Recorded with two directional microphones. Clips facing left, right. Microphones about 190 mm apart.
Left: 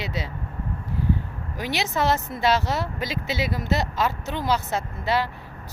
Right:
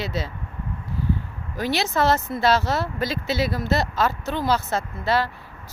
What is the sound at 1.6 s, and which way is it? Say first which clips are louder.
Speech: right 3 dB; 15° left (ahead or behind).